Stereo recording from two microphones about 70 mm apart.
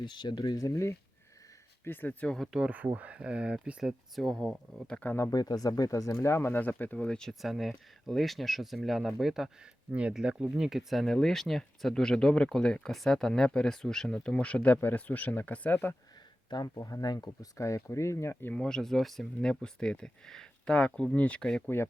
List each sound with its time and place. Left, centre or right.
0.0 s speech: left
0.6 s speech: left
1.8 s speech: left
2.6 s speech: centre
4.1 s speech: centre
4.9 s speech: centre
5.3 s speech: left
6.1 s speech: left
6.9 s speech: centre
7.4 s speech: centre
9.9 s speech: centre
10.7 s speech: centre; by 16.0 s left
16.6 s speech: left
18.5 s speech: centre